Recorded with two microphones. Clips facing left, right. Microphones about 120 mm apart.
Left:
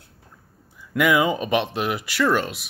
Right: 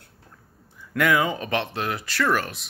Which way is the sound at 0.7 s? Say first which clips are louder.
Left 2 dB; 10° left (ahead or behind).